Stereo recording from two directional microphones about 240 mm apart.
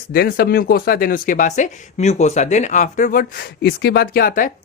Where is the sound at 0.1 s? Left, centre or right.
Left.